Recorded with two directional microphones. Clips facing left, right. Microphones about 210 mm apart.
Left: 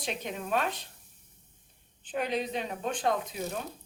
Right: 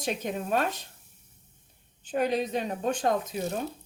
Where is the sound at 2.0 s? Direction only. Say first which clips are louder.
Right 4 dB; 45° right (ahead or behind).